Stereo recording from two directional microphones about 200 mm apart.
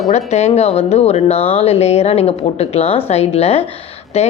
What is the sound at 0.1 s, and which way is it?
A woman's voice, 35° left (ahead or behind).